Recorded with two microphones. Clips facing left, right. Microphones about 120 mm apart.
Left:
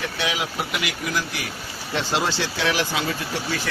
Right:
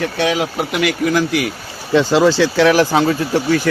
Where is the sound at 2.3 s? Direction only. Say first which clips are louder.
Right 12 dB; 90° right; by 2.9 s 65° right (ahead or behind).